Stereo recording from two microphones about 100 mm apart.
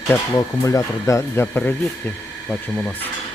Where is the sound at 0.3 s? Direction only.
35° left (ahead or behind).